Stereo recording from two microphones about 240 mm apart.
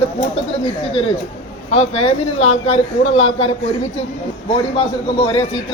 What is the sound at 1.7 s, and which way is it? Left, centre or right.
Speech, left.